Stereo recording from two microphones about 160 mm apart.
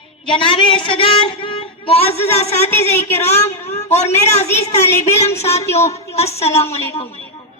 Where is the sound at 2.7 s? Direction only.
15° left (ahead or behind).